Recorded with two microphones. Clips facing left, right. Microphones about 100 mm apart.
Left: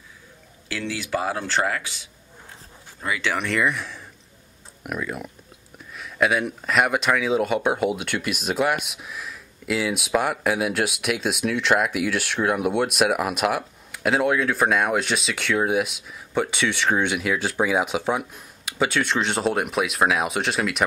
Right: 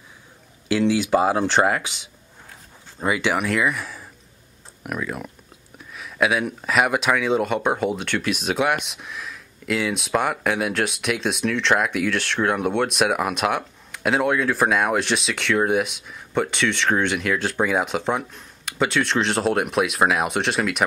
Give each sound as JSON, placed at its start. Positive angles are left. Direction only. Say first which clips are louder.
{"t": 0.7, "sound": "speech", "louder": "right 9 dB", "side_deg": -20}
{"t": 3.4, "sound": "speech", "louder": "right 1 dB", "side_deg": 0}